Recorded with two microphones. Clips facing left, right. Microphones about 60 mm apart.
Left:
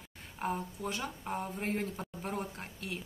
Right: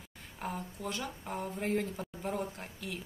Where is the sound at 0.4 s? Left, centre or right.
Left.